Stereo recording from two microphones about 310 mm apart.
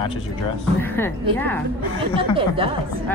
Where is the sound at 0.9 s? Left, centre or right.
Centre.